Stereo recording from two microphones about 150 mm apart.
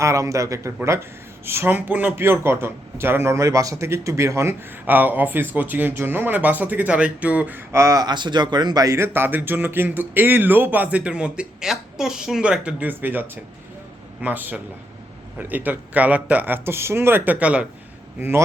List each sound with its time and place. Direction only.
0.0 s a man's voice: 20° right (ahead or behind)